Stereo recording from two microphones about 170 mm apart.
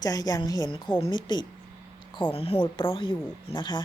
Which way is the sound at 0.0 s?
20° left (ahead or behind).